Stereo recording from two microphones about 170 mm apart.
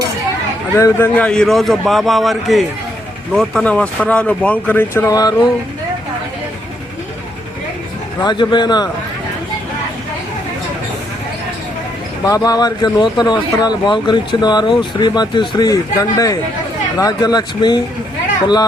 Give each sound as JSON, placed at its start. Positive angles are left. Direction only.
{"t": 0.8, "sound": "a man's voice", "side_deg": 15}
{"t": 8.2, "sound": "speech", "side_deg": 25}
{"t": 12.2, "sound": "speech", "side_deg": 20}